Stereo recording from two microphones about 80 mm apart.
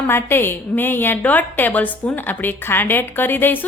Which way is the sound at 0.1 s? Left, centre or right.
Left.